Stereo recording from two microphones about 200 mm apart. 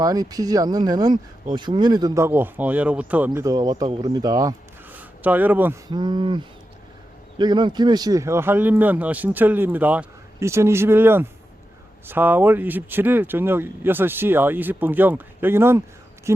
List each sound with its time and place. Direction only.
0.0 s speech: 20° right (ahead or behind)
5.9 s speech: 20° right (ahead or behind)